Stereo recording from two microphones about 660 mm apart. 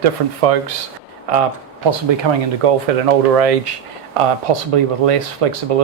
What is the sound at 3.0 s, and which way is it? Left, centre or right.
Speech, right.